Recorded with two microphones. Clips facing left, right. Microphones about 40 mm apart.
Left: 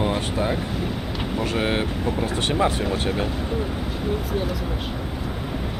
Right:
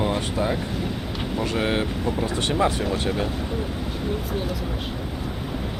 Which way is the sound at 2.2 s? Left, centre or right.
Left.